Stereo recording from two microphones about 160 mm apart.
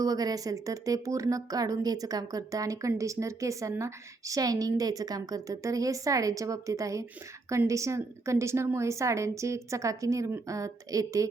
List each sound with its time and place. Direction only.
0.0 s speech: 25° right (ahead or behind)